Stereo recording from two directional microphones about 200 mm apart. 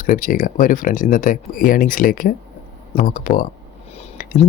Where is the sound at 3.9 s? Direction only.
35° left (ahead or behind).